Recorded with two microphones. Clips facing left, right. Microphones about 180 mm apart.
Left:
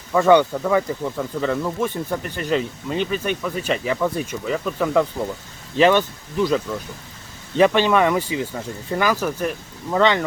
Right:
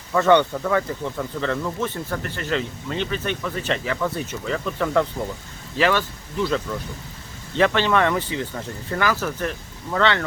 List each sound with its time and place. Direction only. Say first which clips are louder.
0.1 s speech: left 2 dB; 10° left (ahead or behind)
5.7 s speech: left 5 dB; 20° left (ahead or behind)